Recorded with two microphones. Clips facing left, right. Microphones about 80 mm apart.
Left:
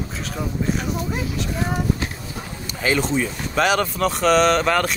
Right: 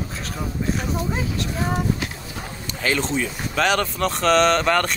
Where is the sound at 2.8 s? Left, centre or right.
Centre.